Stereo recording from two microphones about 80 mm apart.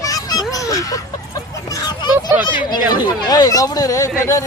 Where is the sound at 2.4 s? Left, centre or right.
Left.